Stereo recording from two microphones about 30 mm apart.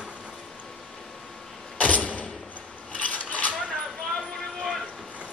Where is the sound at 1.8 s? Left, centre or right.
Left.